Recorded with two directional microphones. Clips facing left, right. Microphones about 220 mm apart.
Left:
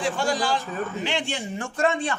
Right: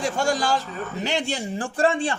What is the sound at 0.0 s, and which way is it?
A man's voice, 45° right (ahead or behind).